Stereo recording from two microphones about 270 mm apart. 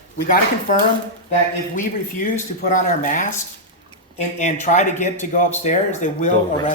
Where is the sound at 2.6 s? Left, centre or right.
Left.